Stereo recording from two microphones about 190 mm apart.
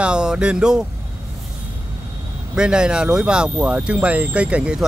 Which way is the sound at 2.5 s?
5° right (ahead or behind).